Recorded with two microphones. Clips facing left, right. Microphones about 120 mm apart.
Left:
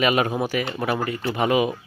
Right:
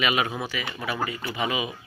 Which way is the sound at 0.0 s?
40° left (ahead or behind).